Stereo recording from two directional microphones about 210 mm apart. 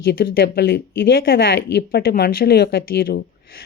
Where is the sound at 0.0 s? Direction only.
45° left (ahead or behind).